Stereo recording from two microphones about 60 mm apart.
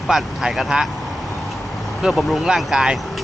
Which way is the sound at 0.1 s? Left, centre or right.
Centre.